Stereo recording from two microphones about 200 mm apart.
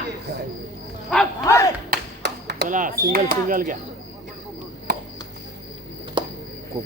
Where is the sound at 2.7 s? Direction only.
40° right (ahead or behind).